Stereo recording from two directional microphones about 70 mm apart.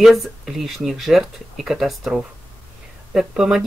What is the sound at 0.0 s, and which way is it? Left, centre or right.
Speech, centre.